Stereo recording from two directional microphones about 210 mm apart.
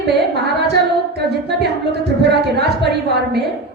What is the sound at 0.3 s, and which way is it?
Music, 50° right (ahead or behind).